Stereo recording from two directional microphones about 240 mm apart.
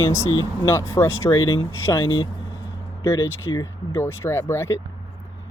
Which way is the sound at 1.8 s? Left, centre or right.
Centre.